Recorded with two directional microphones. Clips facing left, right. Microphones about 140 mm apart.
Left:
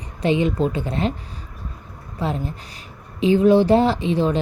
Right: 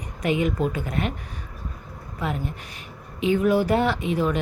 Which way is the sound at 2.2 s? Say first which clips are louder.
Left 3 dB; 30° left (ahead or behind).